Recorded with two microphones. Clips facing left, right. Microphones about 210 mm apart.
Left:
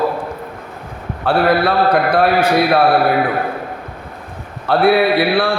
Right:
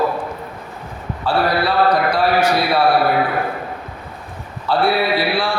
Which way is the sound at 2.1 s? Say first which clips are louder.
Left 3 dB; 55° left (ahead or behind).